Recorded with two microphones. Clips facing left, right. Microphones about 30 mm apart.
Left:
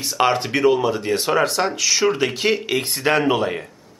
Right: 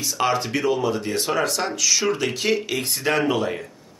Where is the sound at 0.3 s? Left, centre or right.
Left.